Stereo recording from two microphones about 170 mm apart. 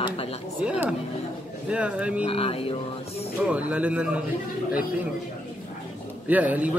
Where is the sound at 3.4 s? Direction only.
10° right (ahead or behind).